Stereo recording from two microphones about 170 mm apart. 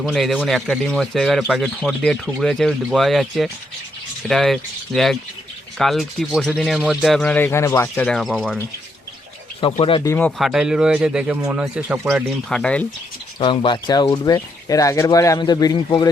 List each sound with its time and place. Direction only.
0.0 s speech: centre (ahead or behind); by 7.9 s 15° left (ahead or behind)
7.9 s speech: 5° left (ahead or behind)
9.6 s speech: 30° left (ahead or behind)
10.0 s speech: 15° left (ahead or behind)
10.3 s speech: centre (ahead or behind)
12.5 s speech: 5° left (ahead or behind)
13.4 s speech: 30° left (ahead or behind)